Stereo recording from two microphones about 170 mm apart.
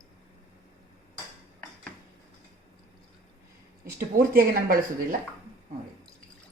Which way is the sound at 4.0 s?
60° right (ahead or behind).